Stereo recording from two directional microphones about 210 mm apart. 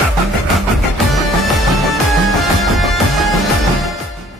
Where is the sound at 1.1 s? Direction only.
Centre (ahead or behind).